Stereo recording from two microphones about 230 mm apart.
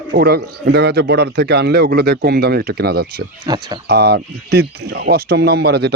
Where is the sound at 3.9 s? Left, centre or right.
Right.